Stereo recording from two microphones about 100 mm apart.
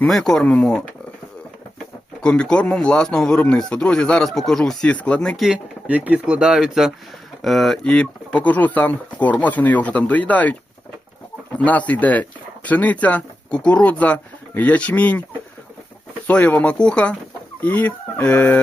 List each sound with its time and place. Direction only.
0.0 s speech: 5° left (ahead or behind)
2.2 s speech: 10° left (ahead or behind)
5.9 s speech: 15° right (ahead or behind); by 15.2 s 15° left (ahead or behind)
16.2 s speech: 15° left (ahead or behind)